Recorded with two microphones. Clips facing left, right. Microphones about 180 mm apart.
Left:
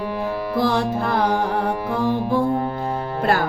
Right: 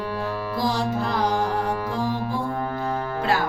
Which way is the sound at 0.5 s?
60° left (ahead or behind).